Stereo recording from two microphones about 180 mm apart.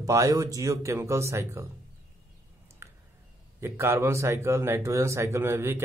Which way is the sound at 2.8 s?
15° right (ahead or behind).